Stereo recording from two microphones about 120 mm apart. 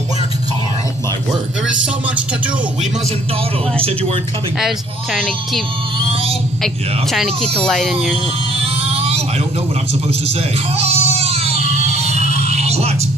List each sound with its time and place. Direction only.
1.3 s music: 5° right (ahead or behind)
5.1 s speech: 5° left (ahead or behind)
7.1 s speech: 5° left (ahead or behind)
8.6 s music: 60° right (ahead or behind)
10.8 s a sound: 60° right (ahead or behind)